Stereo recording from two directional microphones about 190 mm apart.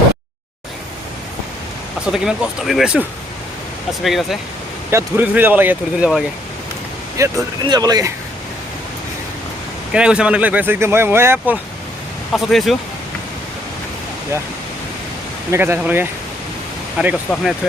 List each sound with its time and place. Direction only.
2.1 s speech: 5° right (ahead or behind)
4.9 s speech: 10° right (ahead or behind)
7.2 s speech: 15° right (ahead or behind)
9.9 s speech: 5° right (ahead or behind)
12.3 s speech: centre (ahead or behind)
15.5 s speech: 10° right (ahead or behind)